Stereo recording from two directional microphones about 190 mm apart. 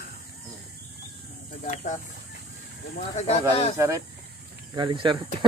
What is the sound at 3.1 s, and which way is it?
Speech, 35° left (ahead or behind).